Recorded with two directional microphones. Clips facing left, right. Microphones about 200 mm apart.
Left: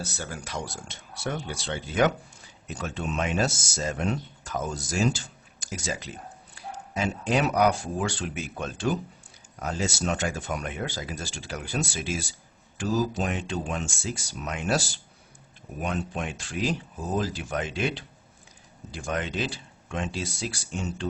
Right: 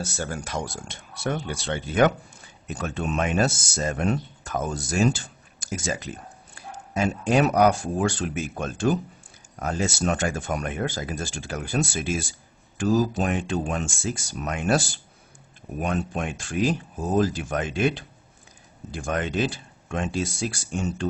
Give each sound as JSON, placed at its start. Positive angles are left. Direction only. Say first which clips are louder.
{"t": 0.0, "sound": "speech", "louder": "right 5 dB", "side_deg": -50}